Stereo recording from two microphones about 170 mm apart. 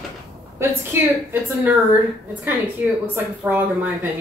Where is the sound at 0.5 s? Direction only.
10° right (ahead or behind).